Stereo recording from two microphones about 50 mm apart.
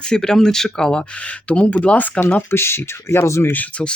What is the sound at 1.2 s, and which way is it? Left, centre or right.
Speech, left.